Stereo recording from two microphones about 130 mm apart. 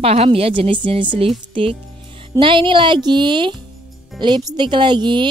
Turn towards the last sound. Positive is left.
turn(degrees=-35)  # may be behind; listen again after turning